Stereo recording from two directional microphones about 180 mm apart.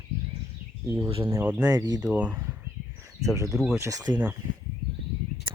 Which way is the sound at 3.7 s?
15° right (ahead or behind).